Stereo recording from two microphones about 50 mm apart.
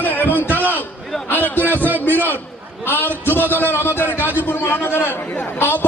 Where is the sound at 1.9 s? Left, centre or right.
Right.